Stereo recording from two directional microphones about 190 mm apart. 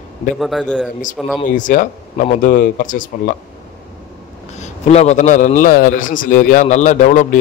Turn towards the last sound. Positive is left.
turn(degrees=40)  # may be behind; listen again after turning